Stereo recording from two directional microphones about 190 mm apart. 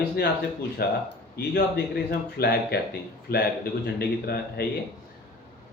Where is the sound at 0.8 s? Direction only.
55° left (ahead or behind).